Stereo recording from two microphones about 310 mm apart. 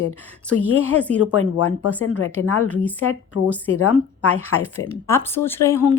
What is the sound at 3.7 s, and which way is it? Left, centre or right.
Speech, left.